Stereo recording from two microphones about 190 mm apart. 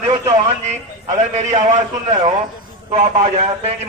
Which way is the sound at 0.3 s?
35° right (ahead or behind).